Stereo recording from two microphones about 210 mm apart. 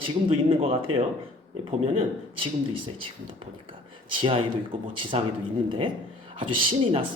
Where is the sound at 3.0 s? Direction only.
25° right (ahead or behind).